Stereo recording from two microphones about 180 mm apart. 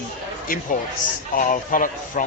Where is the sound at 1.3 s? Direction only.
50° left (ahead or behind).